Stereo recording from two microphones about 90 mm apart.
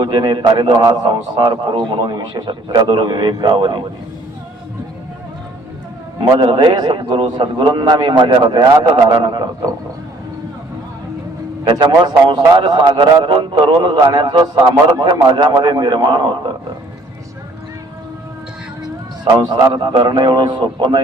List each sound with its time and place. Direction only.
0.0 s a man's voice: 65° right (ahead or behind)
6.4 s a man's voice: 65° right (ahead or behind)
6.7 s a man's voice: 55° right (ahead or behind)
11.6 s a man's voice: 55° right (ahead or behind)
14.9 s a man's voice: 45° right (ahead or behind)
15.4 s a man's voice: 60° right (ahead or behind)
19.9 s a man's voice: 55° right (ahead or behind)